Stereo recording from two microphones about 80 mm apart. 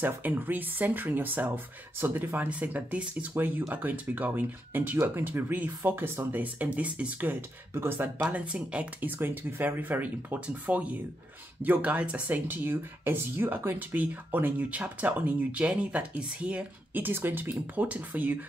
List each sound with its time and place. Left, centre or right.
0.0 s speech: right
8.3 s speech: centre
9.2 s speech: right